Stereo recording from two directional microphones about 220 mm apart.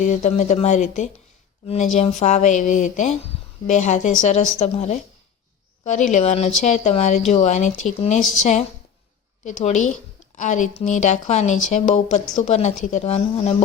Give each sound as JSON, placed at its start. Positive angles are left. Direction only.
{"t": 0.0, "sound": "a woman's voice", "side_deg": 35}